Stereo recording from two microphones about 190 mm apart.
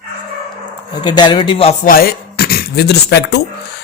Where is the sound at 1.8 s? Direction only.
50° left (ahead or behind).